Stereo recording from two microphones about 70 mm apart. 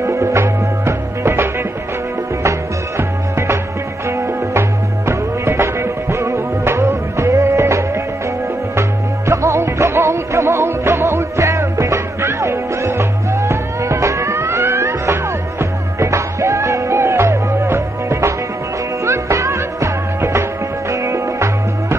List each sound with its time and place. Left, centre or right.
0.0 s music: right
3.0 s music: right
4.6 s music: right